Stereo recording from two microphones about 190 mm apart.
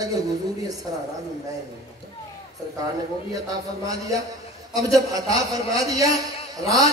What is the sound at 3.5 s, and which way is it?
A man's voice, 20° right (ahead or behind).